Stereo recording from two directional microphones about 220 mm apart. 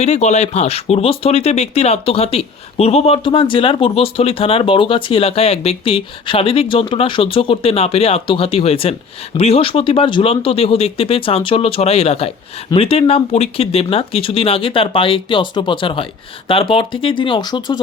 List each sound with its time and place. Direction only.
0.0 s speech: 30° left (ahead or behind)